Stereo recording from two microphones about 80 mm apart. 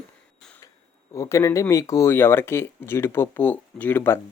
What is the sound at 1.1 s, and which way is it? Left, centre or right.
Speech, left.